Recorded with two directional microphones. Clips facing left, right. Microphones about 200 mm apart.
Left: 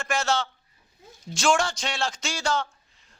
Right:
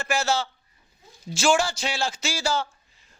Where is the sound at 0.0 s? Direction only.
5° right (ahead or behind).